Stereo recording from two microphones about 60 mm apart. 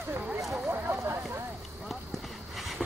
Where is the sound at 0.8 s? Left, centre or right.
Right.